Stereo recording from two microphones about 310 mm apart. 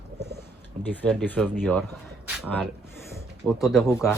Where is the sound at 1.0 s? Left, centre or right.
Centre.